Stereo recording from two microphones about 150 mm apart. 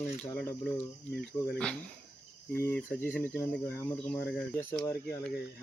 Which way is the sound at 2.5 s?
15° left (ahead or behind).